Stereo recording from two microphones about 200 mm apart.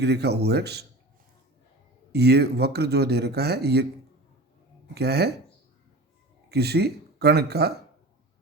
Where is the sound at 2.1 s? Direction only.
55° right (ahead or behind).